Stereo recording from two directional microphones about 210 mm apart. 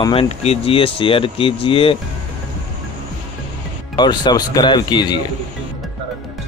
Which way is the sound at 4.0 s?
20° left (ahead or behind).